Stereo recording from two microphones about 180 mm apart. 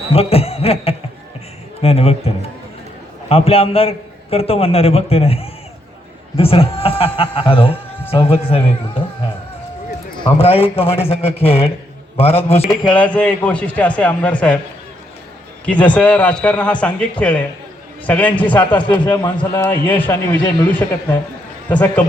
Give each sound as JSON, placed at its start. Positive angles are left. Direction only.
{"t": 0.1, "sound": "a man's voice", "side_deg": 35}
{"t": 10.2, "sound": "a man's voice", "side_deg": 30}
{"t": 12.9, "sound": "a man's voice", "side_deg": 10}
{"t": 15.6, "sound": "a man's voice", "side_deg": 10}
{"t": 18.6, "sound": "speech", "side_deg": 25}
{"t": 19.5, "sound": "a man's voice", "side_deg": 10}